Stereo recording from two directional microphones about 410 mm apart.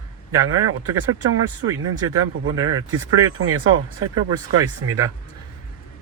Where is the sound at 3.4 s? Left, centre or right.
Right.